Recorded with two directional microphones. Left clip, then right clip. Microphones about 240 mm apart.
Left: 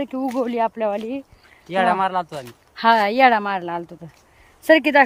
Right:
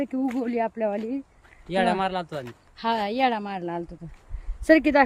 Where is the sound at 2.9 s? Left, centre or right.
Centre.